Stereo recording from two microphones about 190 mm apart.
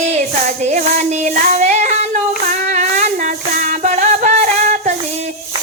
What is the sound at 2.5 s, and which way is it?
Music, 40° right (ahead or behind).